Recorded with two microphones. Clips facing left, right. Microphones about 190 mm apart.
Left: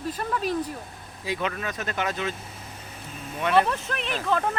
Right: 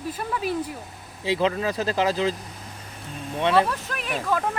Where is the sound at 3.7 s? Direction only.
5° right (ahead or behind).